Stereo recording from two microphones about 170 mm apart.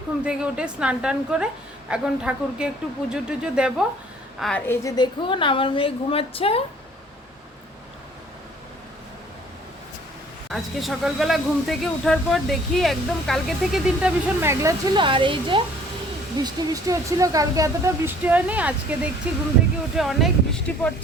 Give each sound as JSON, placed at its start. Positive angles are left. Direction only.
{"t": 0.3, "sound": "a woman's voice", "side_deg": -5}
{"t": 4.6, "sound": "a woman's voice", "side_deg": 15}
{"t": 10.5, "sound": "speech", "side_deg": 0}
{"t": 14.6, "sound": "speech", "side_deg": -25}